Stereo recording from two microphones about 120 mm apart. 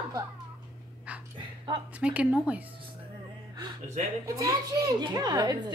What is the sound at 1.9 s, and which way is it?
Speech, 10° right (ahead or behind).